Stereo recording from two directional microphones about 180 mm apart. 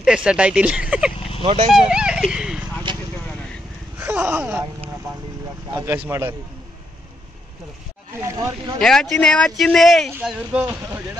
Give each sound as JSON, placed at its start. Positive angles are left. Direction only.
{"t": 0.0, "sound": "speech", "side_deg": -5}
{"t": 1.1, "sound": "vehicle", "side_deg": 30}
{"t": 1.7, "sound": "a sound", "side_deg": -5}
{"t": 4.0, "sound": "a sound", "side_deg": -10}
{"t": 5.7, "sound": "speech", "side_deg": -15}
{"t": 8.2, "sound": "speech", "side_deg": -15}
{"t": 8.7, "sound": "speech", "side_deg": 5}